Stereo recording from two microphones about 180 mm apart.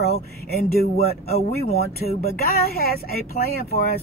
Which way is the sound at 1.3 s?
60° left (ahead or behind).